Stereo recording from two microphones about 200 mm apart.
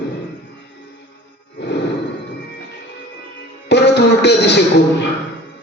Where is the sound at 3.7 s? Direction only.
55° left (ahead or behind).